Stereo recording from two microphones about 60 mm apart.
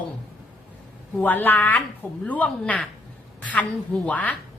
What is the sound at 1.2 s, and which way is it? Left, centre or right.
A woman's voice, left.